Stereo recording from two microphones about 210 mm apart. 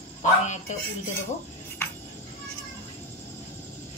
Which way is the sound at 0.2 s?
35° left (ahead or behind).